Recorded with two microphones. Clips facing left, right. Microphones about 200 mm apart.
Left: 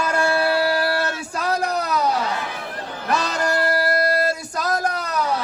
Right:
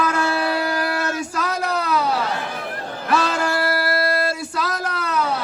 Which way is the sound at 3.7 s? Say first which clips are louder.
Left 1 dB; 40° left (ahead or behind).